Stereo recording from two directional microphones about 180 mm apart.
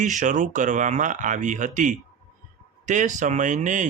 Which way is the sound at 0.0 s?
45° right (ahead or behind).